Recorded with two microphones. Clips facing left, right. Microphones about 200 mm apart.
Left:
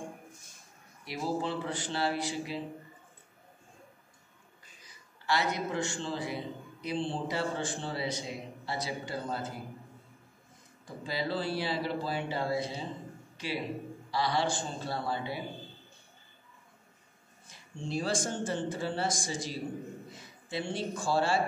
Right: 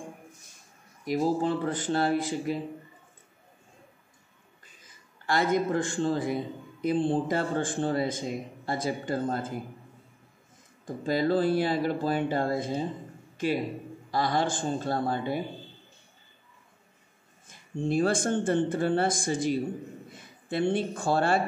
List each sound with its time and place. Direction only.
1.0 s a man's voice: 45° right (ahead or behind)
4.8 s a man's voice: 50° right (ahead or behind)
10.9 s a man's voice: 50° right (ahead or behind)
17.5 s speech: 55° right (ahead or behind)